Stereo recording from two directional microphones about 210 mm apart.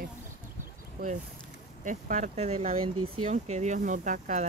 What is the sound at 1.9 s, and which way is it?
Speech, 35° right (ahead or behind).